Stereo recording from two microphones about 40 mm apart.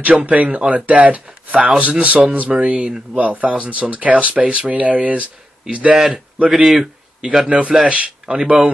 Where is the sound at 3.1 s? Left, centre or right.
Right.